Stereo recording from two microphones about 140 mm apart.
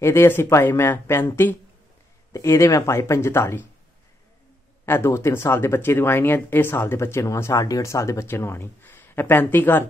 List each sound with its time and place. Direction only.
0.0 s speech: 20° left (ahead or behind)
4.8 s speech: 15° left (ahead or behind)